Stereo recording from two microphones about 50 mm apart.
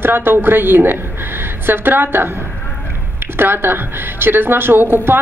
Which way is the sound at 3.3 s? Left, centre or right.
Right.